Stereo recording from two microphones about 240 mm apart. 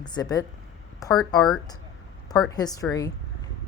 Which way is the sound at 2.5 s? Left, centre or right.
Centre.